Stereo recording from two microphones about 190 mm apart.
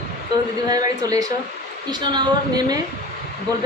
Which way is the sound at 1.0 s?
20° right (ahead or behind).